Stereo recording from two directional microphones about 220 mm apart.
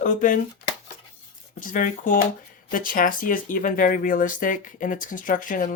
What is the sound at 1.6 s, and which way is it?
Speech, 40° left (ahead or behind).